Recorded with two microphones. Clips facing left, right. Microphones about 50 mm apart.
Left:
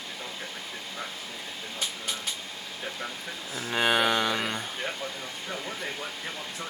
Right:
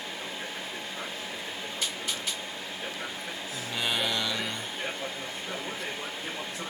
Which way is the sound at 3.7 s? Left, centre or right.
Left.